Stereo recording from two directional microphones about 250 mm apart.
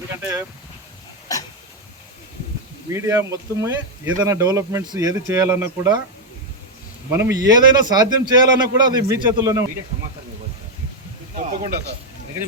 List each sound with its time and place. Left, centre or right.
0.2 s speech: centre
2.9 s speech: centre
7.3 s speech: centre
11.3 s speech: right